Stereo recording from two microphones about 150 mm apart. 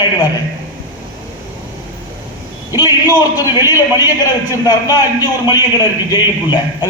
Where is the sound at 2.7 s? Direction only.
25° left (ahead or behind).